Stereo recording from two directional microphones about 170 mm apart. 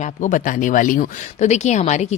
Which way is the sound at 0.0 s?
50° left (ahead or behind).